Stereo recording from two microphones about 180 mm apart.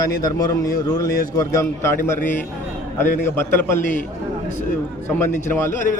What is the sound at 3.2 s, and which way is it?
Speech, 15° left (ahead or behind).